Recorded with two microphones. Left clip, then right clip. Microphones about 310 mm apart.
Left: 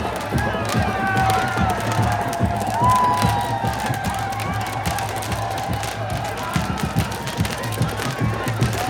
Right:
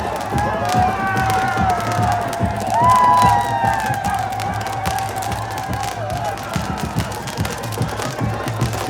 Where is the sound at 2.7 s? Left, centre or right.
Centre.